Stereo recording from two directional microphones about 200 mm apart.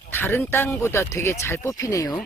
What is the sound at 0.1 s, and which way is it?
Speech, 10° left (ahead or behind).